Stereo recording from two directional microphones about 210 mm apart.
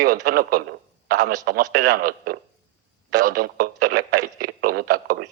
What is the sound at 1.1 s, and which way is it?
A man's voice, 45° right (ahead or behind).